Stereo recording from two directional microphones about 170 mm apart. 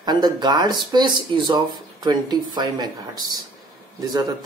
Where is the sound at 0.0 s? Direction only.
25° right (ahead or behind).